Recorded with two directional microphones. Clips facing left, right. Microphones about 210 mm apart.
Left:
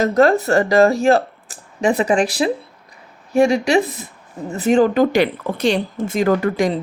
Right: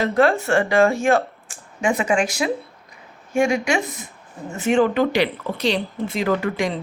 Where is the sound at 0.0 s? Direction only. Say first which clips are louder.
Left 4 dB; 40° left (ahead or behind).